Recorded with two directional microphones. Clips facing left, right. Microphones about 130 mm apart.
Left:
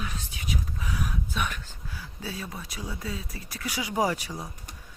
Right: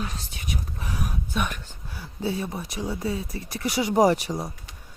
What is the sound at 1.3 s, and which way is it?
Speech, 20° right (ahead or behind).